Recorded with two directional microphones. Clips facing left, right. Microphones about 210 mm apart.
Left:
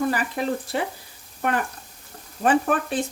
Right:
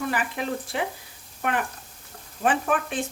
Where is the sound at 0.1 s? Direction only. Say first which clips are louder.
Left 3 dB; 40° left (ahead or behind).